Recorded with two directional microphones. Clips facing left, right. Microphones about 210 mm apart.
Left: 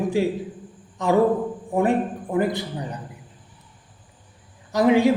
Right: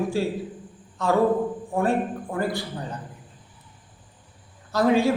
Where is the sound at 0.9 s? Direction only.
15° left (ahead or behind).